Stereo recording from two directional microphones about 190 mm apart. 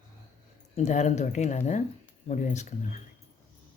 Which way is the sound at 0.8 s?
40° left (ahead or behind).